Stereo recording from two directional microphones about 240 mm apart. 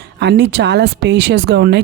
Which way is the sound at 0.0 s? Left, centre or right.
Right.